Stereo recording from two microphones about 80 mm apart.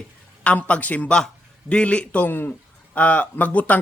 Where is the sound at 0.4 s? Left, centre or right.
Centre.